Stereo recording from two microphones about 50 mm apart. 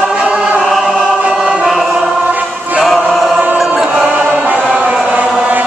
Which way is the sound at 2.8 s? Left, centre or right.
Centre.